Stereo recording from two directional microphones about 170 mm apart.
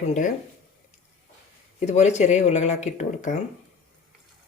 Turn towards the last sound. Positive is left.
turn(degrees=45)  # may be behind; listen again after turning